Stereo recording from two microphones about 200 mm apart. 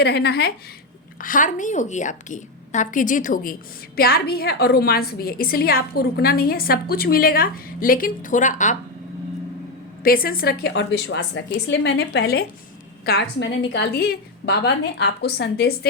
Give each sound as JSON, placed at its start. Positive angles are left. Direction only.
{"t": 0.0, "sound": "a woman's voice", "side_deg": 55}
{"t": 1.2, "sound": "a woman's voice", "side_deg": 40}
{"t": 10.0, "sound": "a woman's voice", "side_deg": 45}